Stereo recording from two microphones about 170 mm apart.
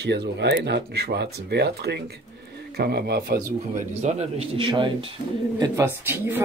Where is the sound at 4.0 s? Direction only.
40° right (ahead or behind); by 5.8 s 25° right (ahead or behind).